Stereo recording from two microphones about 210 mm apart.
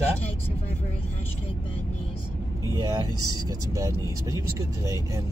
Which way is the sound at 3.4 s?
15° right (ahead or behind).